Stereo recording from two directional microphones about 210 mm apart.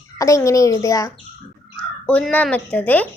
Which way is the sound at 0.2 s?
15° left (ahead or behind).